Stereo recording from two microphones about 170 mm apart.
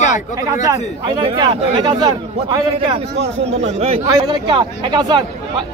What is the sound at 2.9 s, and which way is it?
Speech, 40° right (ahead or behind).